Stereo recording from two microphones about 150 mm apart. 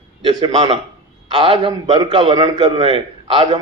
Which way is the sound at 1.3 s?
35° right (ahead or behind).